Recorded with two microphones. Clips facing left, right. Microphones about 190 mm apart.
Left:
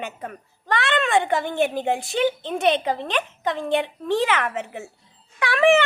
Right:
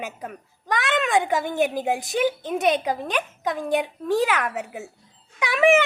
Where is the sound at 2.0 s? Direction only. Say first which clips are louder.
Left 1 dB; 15° right (ahead or behind).